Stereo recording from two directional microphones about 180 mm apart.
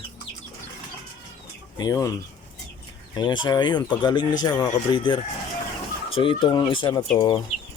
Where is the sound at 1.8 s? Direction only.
20° left (ahead or behind).